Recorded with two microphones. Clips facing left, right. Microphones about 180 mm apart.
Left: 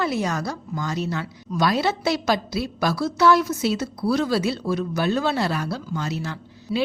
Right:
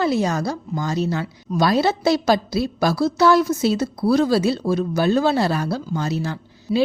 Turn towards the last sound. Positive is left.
turn(degrees=-35)  # may be behind; listen again after turning